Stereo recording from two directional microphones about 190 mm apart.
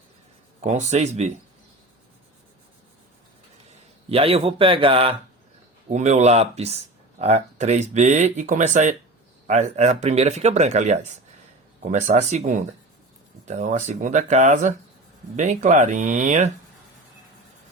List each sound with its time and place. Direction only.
0.6 s speech: 40° right (ahead or behind)
4.1 s speech: 30° right (ahead or behind)